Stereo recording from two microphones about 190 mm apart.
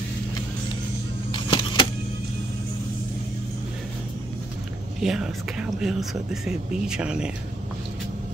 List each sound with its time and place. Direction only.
1.3 s vehicle: 25° left (ahead or behind)
5.0 s speech: centre (ahead or behind)